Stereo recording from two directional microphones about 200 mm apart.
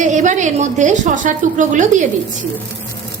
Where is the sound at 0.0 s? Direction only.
40° right (ahead or behind).